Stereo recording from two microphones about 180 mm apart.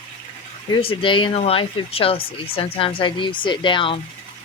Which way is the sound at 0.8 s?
30° left (ahead or behind).